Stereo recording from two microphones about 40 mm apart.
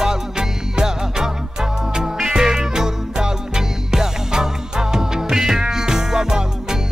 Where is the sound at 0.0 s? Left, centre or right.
Centre.